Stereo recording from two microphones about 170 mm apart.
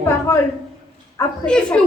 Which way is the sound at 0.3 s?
20° left (ahead or behind).